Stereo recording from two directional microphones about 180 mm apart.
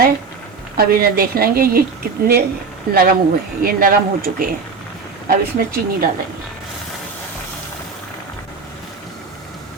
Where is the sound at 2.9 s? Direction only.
55° right (ahead or behind).